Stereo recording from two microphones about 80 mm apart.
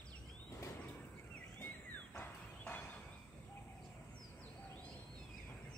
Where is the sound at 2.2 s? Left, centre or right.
Left.